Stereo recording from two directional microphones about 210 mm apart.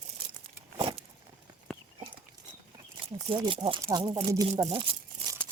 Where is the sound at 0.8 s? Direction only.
25° right (ahead or behind).